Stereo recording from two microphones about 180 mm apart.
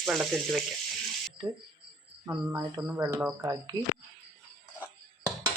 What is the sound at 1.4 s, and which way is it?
Speech, 20° right (ahead or behind).